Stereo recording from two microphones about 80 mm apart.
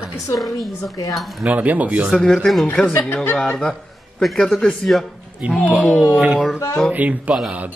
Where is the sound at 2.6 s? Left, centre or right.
Centre.